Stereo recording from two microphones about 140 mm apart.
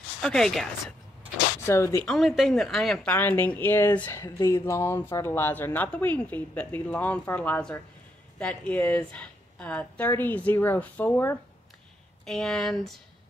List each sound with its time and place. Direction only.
0.2 s speech: 5° left (ahead or behind)
1.7 s speech: 20° left (ahead or behind)
2.0 s speech: centre (ahead or behind)
12.3 s speech: 5° left (ahead or behind)